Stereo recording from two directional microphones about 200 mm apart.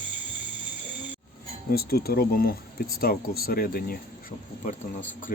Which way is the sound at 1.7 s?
50° left (ahead or behind).